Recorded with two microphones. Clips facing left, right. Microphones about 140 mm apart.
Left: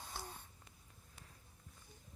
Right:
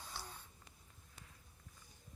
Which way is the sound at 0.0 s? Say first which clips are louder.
Left 2 dB; 50° left (ahead or behind).